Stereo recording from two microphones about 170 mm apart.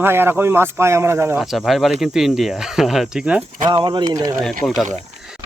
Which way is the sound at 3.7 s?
30° right (ahead or behind).